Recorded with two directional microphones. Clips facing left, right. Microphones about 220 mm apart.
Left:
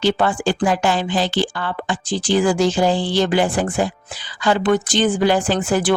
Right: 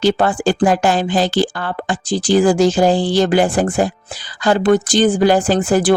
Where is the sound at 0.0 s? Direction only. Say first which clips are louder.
Right 3 dB; 40° right (ahead or behind).